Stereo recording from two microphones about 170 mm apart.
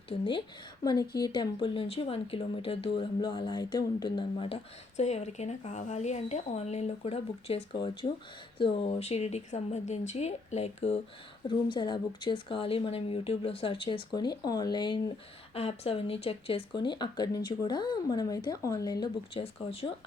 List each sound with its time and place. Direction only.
1.2 s speech: 25° left (ahead or behind)
15.5 s speech: 35° left (ahead or behind)
19.4 s speech: 35° left (ahead or behind)